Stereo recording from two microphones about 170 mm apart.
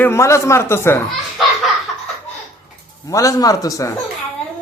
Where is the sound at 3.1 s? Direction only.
20° left (ahead or behind).